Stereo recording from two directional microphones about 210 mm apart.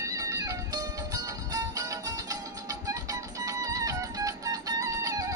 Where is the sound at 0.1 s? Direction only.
15° right (ahead or behind).